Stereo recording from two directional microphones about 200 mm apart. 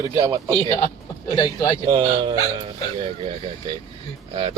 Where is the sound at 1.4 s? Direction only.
15° left (ahead or behind).